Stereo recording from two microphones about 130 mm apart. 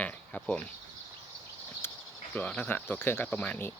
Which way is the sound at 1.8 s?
15° left (ahead or behind).